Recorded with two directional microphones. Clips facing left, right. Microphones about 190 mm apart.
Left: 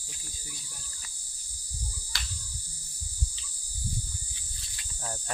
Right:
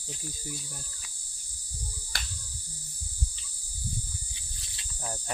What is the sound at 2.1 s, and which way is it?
Cricket, 55° right (ahead or behind).